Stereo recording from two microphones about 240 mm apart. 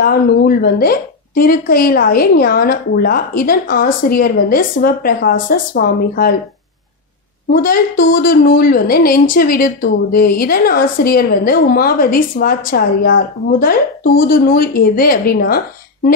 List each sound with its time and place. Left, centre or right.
0.0 s a woman's voice: left
7.5 s a woman's voice: left